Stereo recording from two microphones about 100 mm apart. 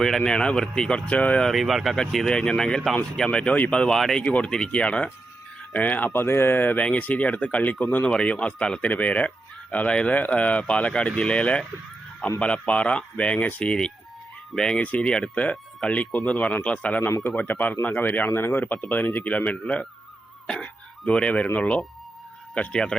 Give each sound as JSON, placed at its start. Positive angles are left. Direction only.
{"t": 0.0, "sound": "speech", "side_deg": 5}